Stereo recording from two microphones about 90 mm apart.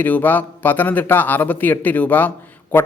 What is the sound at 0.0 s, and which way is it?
Speech, 20° left (ahead or behind).